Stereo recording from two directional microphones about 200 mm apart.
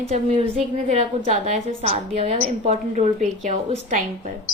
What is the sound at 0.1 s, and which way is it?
A woman's voice, 30° right (ahead or behind).